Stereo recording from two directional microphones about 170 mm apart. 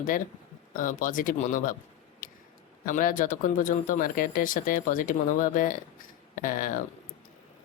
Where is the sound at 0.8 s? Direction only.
50° left (ahead or behind).